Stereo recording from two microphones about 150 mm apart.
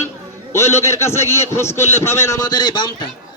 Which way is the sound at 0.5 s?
20° left (ahead or behind).